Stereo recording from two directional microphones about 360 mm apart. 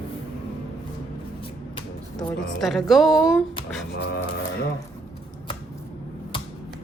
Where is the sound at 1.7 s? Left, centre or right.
Centre.